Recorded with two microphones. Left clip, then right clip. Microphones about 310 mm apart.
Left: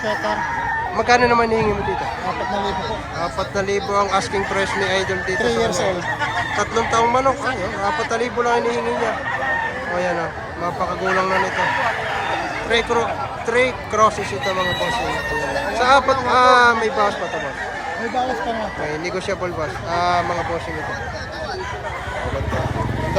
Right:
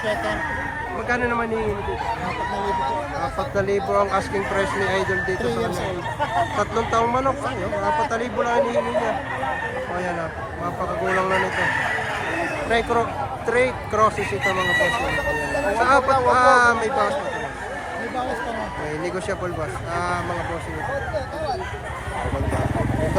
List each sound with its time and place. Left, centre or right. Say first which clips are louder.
1.0 s a man's voice: left 8 dB; centre
3.5 s speech: even; centre
5.5 s speech: left 5 dB; left
6.6 s speech: left 6 dB; centre
12.7 s speech: left 3 dB; centre
15.8 s speech: left 3 dB; centre
19.9 s a man's voice: left 7 dB; centre